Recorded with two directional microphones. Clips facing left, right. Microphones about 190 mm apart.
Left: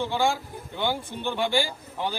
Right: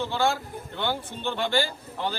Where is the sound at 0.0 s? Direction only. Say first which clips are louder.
Even; 15° left (ahead or behind).